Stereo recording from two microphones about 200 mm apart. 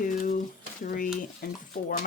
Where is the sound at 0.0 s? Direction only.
45° left (ahead or behind).